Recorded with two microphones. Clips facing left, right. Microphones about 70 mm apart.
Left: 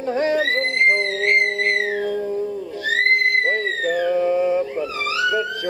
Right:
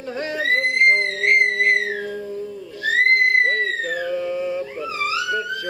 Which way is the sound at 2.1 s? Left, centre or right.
Left.